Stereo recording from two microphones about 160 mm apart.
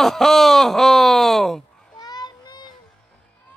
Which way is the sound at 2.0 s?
25° left (ahead or behind).